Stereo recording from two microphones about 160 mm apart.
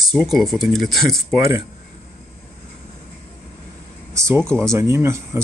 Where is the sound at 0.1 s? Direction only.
Centre (ahead or behind).